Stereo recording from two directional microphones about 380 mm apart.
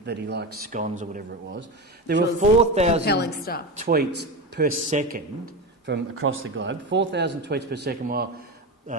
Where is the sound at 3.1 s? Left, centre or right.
Left.